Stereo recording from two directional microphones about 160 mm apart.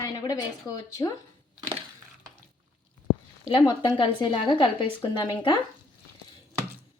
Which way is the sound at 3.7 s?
30° left (ahead or behind).